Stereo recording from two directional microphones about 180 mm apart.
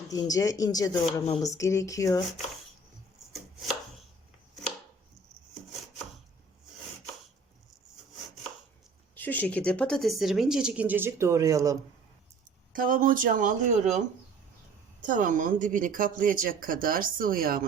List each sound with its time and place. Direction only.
0.1 s speech: 20° left (ahead or behind)
9.1 s speech: 10° left (ahead or behind); by 11.8 s 20° right (ahead or behind)
12.7 s speech: 50° right (ahead or behind)
15.0 s speech: 45° right (ahead or behind)